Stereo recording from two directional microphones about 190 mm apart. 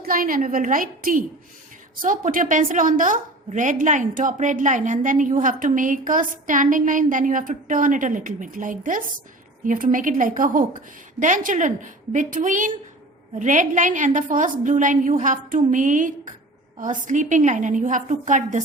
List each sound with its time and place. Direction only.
0.0 s a woman's voice: 50° right (ahead or behind)